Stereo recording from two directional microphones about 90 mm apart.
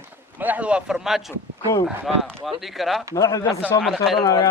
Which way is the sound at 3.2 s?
40° left (ahead or behind).